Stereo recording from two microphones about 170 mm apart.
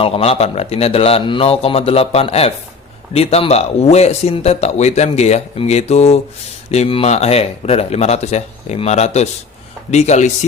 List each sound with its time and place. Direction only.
0.0 s speech: 35° left (ahead or behind)